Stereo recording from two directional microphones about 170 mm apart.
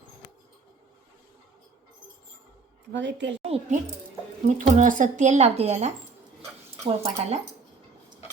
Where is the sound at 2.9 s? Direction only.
90° right.